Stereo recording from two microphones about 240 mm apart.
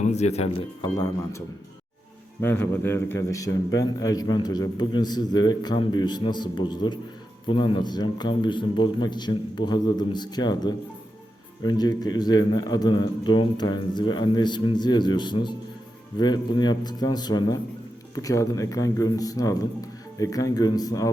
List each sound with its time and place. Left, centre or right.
0.0 s speech: left
2.4 s a man's voice: centre